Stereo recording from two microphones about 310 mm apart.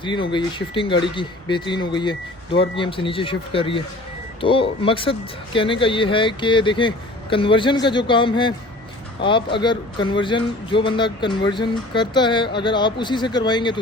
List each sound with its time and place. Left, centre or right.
0.0 s a man's voice: centre